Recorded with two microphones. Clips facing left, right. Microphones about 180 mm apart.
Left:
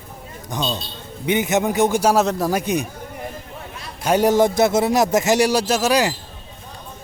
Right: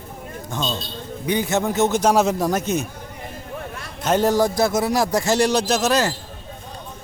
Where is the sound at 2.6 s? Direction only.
15° left (ahead or behind).